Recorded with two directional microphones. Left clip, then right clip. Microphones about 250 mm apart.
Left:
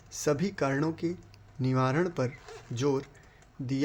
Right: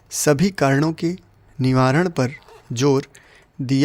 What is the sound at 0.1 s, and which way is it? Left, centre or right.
Speech, right.